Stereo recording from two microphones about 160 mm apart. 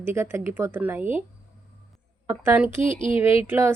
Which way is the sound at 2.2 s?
15° right (ahead or behind).